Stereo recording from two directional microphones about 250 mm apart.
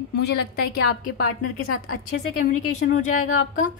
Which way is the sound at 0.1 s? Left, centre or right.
Left.